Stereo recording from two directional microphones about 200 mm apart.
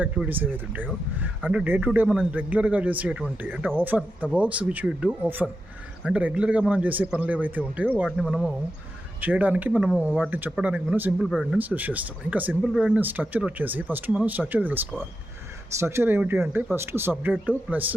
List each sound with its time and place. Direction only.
0.0 s speech: 5° right (ahead or behind)
15.8 s speech: 15° right (ahead or behind)